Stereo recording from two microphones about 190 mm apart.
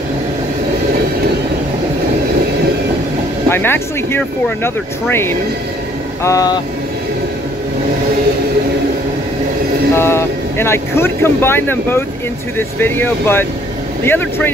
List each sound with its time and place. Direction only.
3.4 s speech: 10° left (ahead or behind)
9.9 s speech: 15° left (ahead or behind)